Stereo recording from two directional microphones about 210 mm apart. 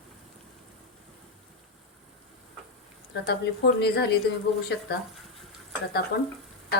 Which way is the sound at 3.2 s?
50° left (ahead or behind).